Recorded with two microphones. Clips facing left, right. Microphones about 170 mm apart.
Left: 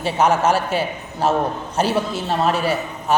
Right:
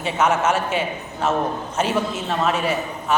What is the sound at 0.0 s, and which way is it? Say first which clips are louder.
A man's voice: left 3 dB; 35° left (ahead or behind).